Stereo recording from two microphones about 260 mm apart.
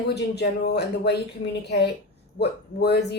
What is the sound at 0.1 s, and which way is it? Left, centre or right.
A woman's voice, left.